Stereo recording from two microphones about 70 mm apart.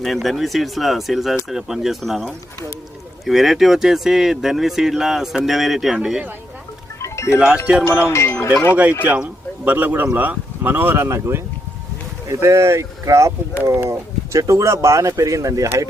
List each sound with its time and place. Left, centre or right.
0.0 s speech: centre
7.0 s music: left
7.3 s speech: centre
7.9 s speech: left
8.7 s speech: right